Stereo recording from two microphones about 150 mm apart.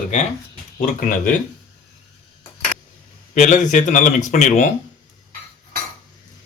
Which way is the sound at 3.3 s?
55° left (ahead or behind).